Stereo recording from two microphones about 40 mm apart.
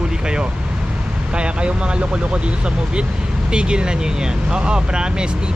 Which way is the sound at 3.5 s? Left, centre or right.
Right.